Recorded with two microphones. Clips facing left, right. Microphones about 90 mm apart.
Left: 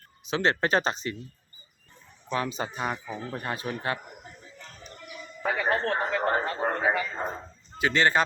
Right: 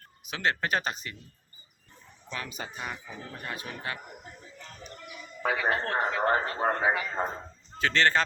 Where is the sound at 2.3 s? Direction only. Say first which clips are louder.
Left 8 dB; 30° left (ahead or behind).